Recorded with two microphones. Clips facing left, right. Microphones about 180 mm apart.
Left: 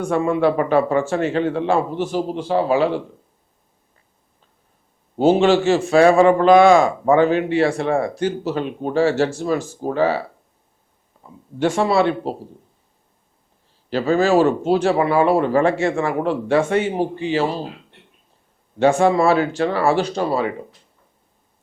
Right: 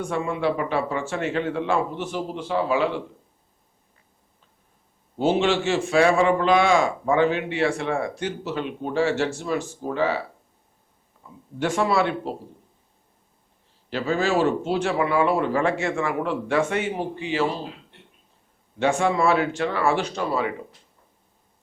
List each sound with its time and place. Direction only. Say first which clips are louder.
0.0 s a man's voice: left 7 dB; 45° left (ahead or behind)
5.1 s a man's voice: left 6 dB; 40° left (ahead or behind)
11.6 s speech: left 5 dB; 30° left (ahead or behind)
13.9 s a man's voice: left 7 dB; 40° left (ahead or behind)
18.8 s a man's voice: left 6 dB; 35° left (ahead or behind)